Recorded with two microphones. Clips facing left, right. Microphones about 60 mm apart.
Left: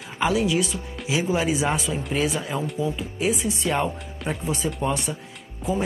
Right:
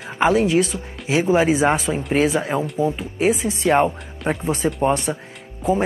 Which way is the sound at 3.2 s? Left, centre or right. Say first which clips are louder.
Right 6 dB; right.